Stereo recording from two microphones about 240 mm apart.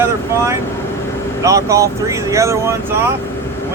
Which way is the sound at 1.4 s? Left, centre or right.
Centre.